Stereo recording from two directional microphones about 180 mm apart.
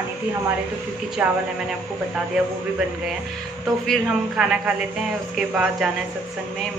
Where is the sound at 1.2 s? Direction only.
5° right (ahead or behind).